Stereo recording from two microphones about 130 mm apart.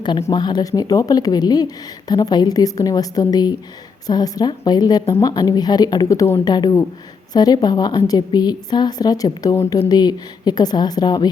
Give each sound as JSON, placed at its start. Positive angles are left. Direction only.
{"t": 0.3, "sound": "a woman's voice", "side_deg": 35}
{"t": 6.4, "sound": "a woman's voice", "side_deg": 30}